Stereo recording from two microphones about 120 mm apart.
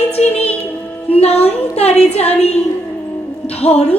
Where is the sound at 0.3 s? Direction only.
10° left (ahead or behind).